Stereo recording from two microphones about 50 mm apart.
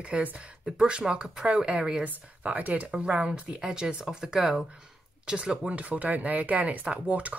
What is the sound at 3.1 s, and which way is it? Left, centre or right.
Speech, right.